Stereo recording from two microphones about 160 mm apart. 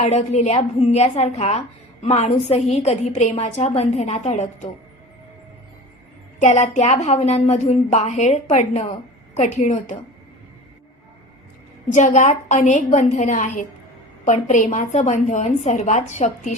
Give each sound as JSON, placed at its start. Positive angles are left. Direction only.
{"t": 0.0, "sound": "speech", "side_deg": 45}
{"t": 6.4, "sound": "speech", "side_deg": 45}
{"t": 11.9, "sound": "speech", "side_deg": 50}